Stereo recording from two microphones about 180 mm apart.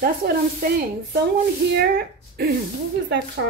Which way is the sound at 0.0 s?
55° right (ahead or behind).